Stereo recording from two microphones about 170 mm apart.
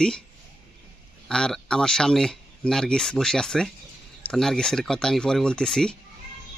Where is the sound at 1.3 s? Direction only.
5° left (ahead or behind).